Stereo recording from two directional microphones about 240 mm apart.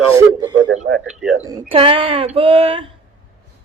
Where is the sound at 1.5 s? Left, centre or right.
Centre.